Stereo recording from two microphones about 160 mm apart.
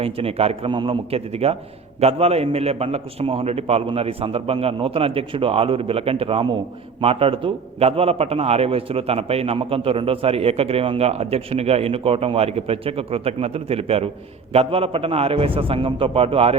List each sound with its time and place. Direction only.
0.0 s a man's voice: 40° right (ahead or behind)